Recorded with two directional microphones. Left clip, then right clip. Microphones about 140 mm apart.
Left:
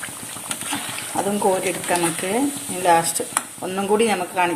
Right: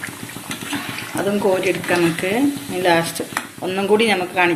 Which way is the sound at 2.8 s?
75° left (ahead or behind).